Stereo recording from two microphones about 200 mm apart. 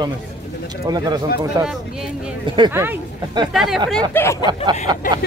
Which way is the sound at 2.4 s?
25° right (ahead or behind).